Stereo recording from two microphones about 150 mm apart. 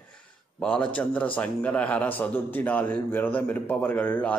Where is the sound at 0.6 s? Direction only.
5° left (ahead or behind).